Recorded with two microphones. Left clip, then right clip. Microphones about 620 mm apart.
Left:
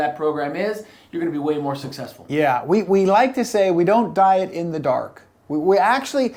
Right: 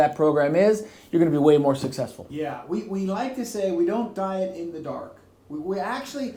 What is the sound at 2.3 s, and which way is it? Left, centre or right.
Speech, left.